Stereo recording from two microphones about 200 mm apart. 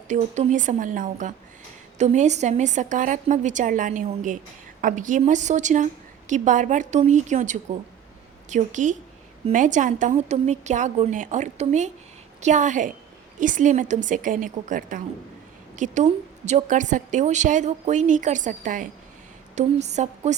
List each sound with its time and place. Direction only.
0.1 s a woman's voice: 40° right (ahead or behind)